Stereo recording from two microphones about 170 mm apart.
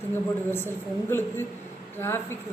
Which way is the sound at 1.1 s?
15° left (ahead or behind).